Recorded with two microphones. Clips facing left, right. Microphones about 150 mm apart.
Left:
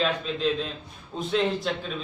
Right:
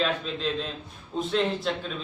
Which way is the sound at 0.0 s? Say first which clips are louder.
Left 2 dB; centre (ahead or behind).